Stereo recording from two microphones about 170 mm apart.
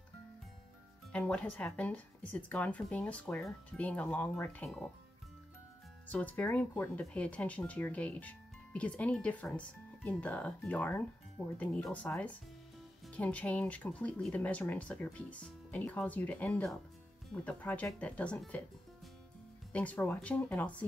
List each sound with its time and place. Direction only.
1.1 s speech: 5° left (ahead or behind)
6.0 s speech: 10° left (ahead or behind)
19.7 s speech: 10° left (ahead or behind)